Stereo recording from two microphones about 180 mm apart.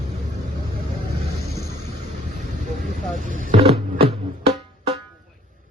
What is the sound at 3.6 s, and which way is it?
Music, 30° right (ahead or behind).